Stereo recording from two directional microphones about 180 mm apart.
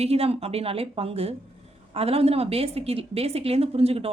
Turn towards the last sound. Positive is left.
turn(degrees=-35)  # may be behind; listen again after turning